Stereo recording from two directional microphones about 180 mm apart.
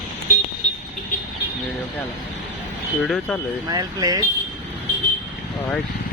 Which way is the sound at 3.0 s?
10° left (ahead or behind).